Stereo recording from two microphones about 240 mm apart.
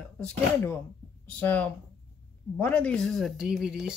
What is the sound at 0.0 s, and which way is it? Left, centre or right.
Speech, centre.